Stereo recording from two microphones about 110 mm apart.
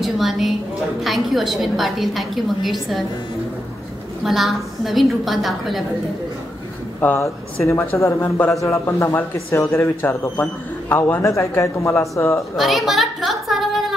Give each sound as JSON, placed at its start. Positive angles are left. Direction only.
{"t": 0.0, "sound": "a woman's voice", "side_deg": 0}
{"t": 4.2, "sound": "a woman's voice", "side_deg": 0}
{"t": 7.0, "sound": "a man's voice", "side_deg": 20}
{"t": 12.5, "sound": "a sound", "side_deg": 0}